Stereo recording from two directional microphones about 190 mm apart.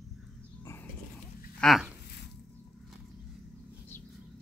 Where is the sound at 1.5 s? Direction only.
Centre (ahead or behind).